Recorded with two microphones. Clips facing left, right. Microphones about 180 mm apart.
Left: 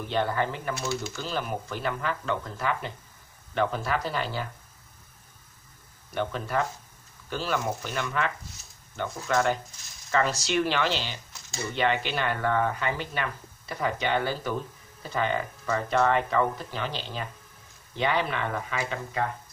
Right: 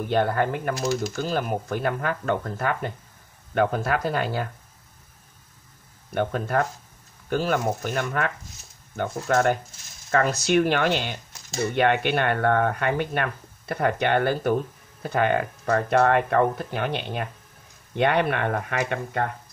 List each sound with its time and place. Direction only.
0.0 s speech: 55° right (ahead or behind)
6.1 s speech: 50° right (ahead or behind)